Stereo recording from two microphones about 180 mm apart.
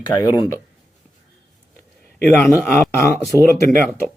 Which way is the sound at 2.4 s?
15° left (ahead or behind).